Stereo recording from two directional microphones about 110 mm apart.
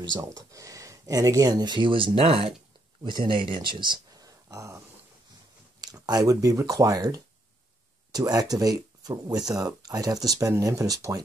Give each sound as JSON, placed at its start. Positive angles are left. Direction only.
{"t": 0.2, "sound": "speech", "side_deg": -30}
{"t": 3.0, "sound": "speech", "side_deg": -40}
{"t": 5.8, "sound": "speech", "side_deg": -35}